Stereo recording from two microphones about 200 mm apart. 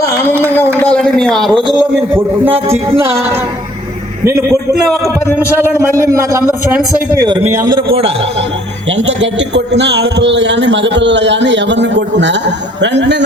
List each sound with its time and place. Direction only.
0.8 s a man's voice: 5° left (ahead or behind); by 4.5 s 10° right (ahead or behind)
6.3 s a man's voice: 10° right (ahead or behind)
8.9 s a man's voice: 65° right (ahead or behind)